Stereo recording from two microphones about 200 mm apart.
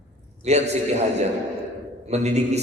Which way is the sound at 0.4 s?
35° right (ahead or behind).